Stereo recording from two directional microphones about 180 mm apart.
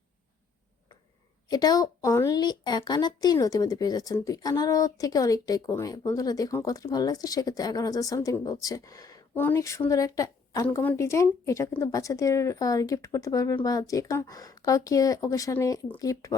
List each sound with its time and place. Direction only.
1.5 s a woman's voice: 20° left (ahead or behind)